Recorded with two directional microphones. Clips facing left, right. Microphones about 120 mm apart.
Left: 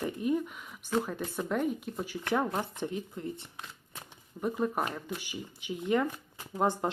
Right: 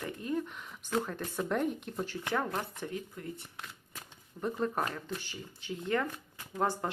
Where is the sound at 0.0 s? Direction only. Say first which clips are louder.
Left 5 dB; 15° left (ahead or behind).